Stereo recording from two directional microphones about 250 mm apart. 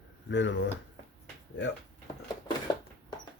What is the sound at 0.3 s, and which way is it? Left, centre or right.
Speech, left.